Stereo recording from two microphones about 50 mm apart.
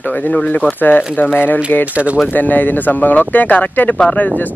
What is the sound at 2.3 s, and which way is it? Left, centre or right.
Speech, left.